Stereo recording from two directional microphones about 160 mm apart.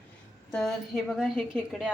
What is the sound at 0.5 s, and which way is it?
A woman's voice, centre (ahead or behind).